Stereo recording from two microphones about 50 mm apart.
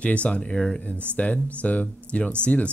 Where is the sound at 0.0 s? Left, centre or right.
Left.